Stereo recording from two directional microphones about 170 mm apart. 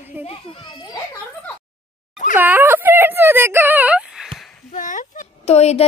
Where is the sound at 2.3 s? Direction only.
10° right (ahead or behind).